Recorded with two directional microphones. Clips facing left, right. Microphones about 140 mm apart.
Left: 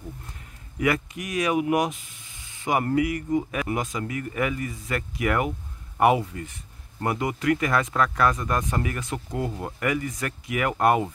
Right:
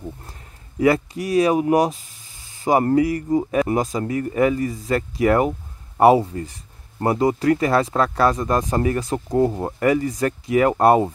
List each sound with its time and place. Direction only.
0.3 s speech: 30° right (ahead or behind)